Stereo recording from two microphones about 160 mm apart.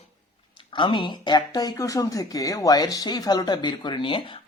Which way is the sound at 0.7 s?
30° left (ahead or behind).